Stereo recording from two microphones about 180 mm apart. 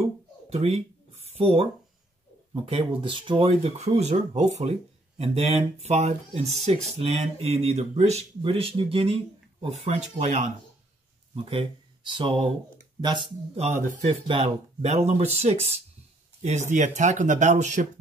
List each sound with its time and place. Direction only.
0.0 s a sound: 35° right (ahead or behind)
2.5 s speech: 25° right (ahead or behind)
11.4 s speech: 30° right (ahead or behind)